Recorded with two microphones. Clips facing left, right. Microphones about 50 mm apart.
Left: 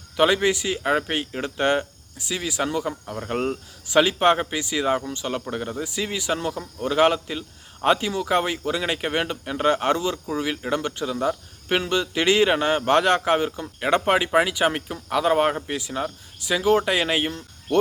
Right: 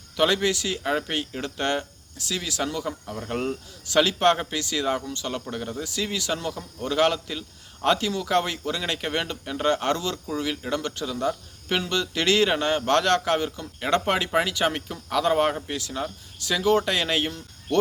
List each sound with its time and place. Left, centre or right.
0.2 s speech: centre